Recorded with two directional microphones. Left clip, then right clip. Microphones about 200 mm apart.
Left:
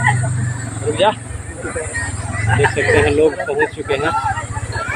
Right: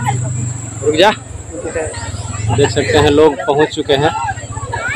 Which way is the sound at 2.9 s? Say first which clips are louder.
Right 5 dB; 40° right (ahead or behind).